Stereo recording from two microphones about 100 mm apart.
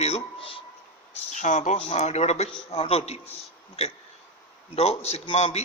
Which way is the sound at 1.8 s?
90° left.